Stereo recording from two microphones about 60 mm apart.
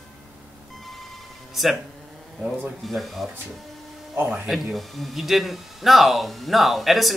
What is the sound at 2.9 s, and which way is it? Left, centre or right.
Speech, centre.